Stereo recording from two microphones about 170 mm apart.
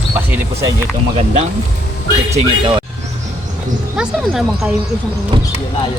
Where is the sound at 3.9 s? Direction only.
5° right (ahead or behind).